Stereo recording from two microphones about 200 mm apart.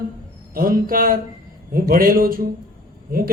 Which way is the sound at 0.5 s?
45° right (ahead or behind).